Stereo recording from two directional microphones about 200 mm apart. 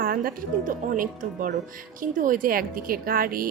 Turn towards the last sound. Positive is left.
turn(degrees=-45)  # may be behind; listen again after turning